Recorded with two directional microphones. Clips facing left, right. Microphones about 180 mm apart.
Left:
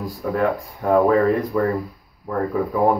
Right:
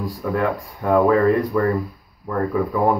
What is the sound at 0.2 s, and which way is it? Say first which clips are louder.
Speech: left 1 dB; 30° left (ahead or behind).